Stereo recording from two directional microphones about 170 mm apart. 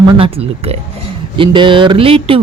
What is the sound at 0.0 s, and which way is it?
Speech, 30° right (ahead or behind).